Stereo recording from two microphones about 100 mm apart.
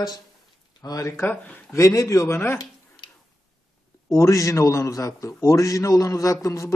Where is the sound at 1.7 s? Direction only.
30° left (ahead or behind).